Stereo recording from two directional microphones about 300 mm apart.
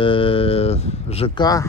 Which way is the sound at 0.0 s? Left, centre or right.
Centre.